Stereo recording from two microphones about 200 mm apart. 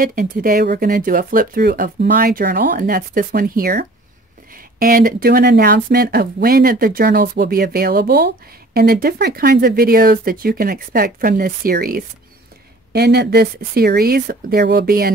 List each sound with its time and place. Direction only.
0.0 s speech: 40° right (ahead or behind)